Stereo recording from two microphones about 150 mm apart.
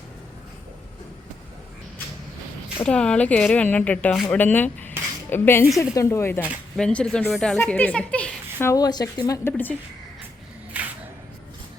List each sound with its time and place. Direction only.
2.7 s a woman's voice: 5° left (ahead or behind)
6.7 s a woman's voice: 5° left (ahead or behind)
10.8 s a sound: 10° right (ahead or behind)